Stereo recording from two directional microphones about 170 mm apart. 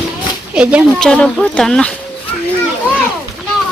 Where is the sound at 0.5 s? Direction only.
5° right (ahead or behind).